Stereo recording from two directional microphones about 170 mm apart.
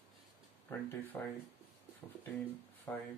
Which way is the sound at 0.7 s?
10° left (ahead or behind).